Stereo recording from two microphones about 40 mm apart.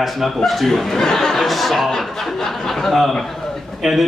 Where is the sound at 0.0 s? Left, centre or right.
Centre.